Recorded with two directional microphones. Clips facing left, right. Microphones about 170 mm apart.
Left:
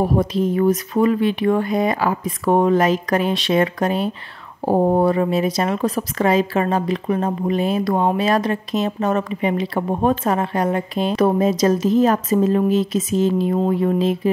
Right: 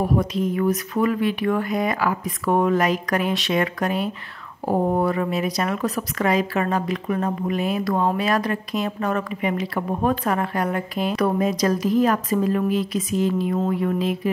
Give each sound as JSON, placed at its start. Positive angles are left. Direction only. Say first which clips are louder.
{"t": 0.0, "sound": "speech", "louder": "left 3 dB", "side_deg": 30}